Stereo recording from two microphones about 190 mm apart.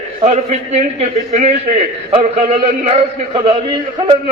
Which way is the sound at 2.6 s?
30° right (ahead or behind).